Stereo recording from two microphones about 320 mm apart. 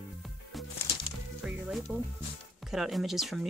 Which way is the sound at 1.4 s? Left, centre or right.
Centre.